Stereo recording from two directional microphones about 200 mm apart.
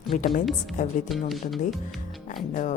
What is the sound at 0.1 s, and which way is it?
Speech, 35° left (ahead or behind).